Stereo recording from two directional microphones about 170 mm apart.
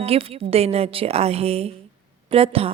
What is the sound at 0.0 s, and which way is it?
A woman's voice, 35° right (ahead or behind).